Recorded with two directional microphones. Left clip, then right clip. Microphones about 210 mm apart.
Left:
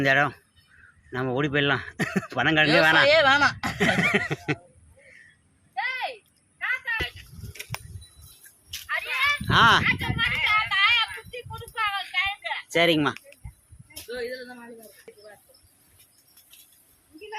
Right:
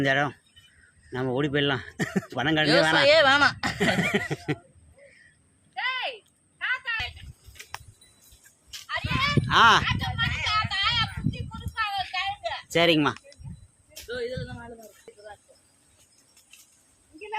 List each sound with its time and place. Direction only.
0.0 s speech: centre (ahead or behind)
5.7 s a sound: 45° left (ahead or behind)
8.9 s horse: 55° right (ahead or behind)
9.5 s speech: centre (ahead or behind)
9.8 s a sound: 55° right (ahead or behind)
12.6 s speech: centre (ahead or behind)
14.1 s speech: 20° left (ahead or behind)